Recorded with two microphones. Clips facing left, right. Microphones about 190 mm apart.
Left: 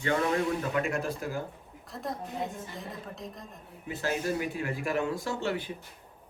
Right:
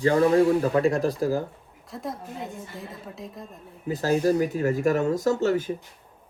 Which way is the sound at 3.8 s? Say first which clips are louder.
Right 9 dB; 40° right (ahead or behind).